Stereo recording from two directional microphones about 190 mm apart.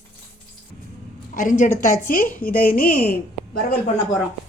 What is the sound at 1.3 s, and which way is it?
A woman's voice, 45° left (ahead or behind).